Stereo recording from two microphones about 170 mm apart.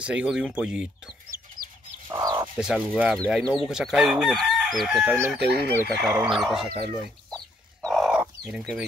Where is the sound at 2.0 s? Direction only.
15° right (ahead or behind).